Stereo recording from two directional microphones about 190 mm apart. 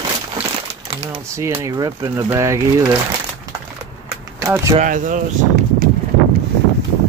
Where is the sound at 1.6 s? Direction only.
20° right (ahead or behind).